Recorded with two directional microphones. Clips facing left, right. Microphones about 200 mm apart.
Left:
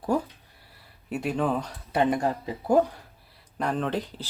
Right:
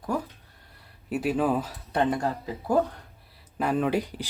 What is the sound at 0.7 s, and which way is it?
Speech, centre (ahead or behind).